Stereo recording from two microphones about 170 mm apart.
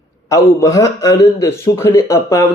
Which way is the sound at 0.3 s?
20° left (ahead or behind).